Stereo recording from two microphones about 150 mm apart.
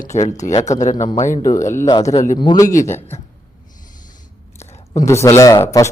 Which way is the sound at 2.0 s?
55° left (ahead or behind).